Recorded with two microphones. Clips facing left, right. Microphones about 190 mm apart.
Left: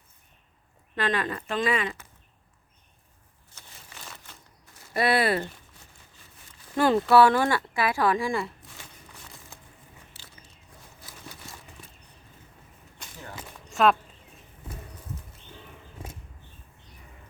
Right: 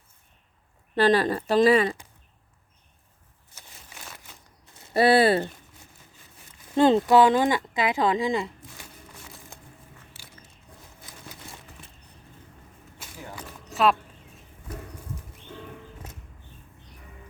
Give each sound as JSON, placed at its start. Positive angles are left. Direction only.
{"t": 0.9, "sound": "speech", "side_deg": -35}
{"t": 3.5, "sound": "a sound", "side_deg": -5}
{"t": 4.7, "sound": "speech", "side_deg": -25}
{"t": 6.7, "sound": "speech", "side_deg": -20}
{"t": 13.0, "sound": "arrow", "side_deg": -10}
{"t": 13.7, "sound": "a sound", "side_deg": 0}